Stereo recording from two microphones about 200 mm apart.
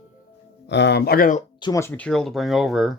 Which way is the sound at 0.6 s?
60° left (ahead or behind).